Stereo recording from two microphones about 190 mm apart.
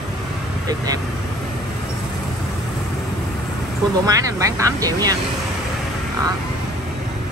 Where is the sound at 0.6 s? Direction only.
20° right (ahead or behind).